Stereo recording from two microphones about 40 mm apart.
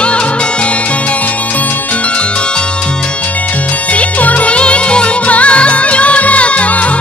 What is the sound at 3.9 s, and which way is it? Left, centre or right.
Music, left.